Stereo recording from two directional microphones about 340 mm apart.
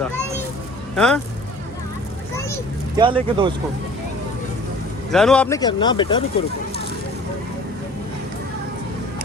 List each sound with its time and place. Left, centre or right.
0.9 s speech: centre
2.9 s speech: centre
5.1 s speech: centre